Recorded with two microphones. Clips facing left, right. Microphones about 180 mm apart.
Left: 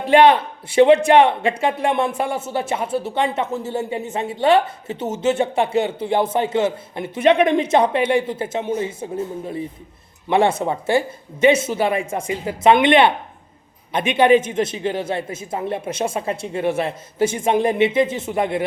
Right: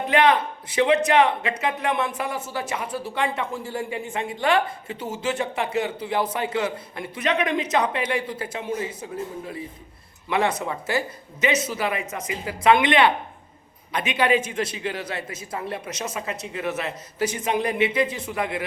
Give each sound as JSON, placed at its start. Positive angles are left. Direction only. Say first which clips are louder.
{"t": 0.1, "sound": "speech", "louder": "left 7 dB", "side_deg": 30}
{"t": 10.2, "sound": "speech", "louder": "left 6 dB", "side_deg": 25}
{"t": 14.2, "sound": "speech", "louder": "left 7 dB", "side_deg": 25}